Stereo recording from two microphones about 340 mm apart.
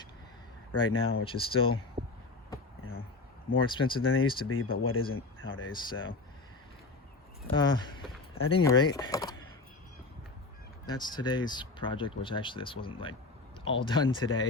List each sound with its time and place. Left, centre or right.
0.7 s speech: left
1.2 s speech: centre
3.7 s speech: centre
4.0 s speech: left
5.7 s speech: centre
7.5 s speech: centre
10.8 s speech: centre